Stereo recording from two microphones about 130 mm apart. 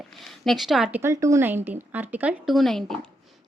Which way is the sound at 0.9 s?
20° right (ahead or behind).